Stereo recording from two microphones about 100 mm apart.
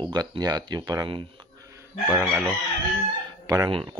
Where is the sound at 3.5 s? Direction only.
45° right (ahead or behind).